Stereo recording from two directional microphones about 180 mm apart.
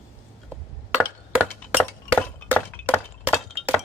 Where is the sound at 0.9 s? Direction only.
10° right (ahead or behind).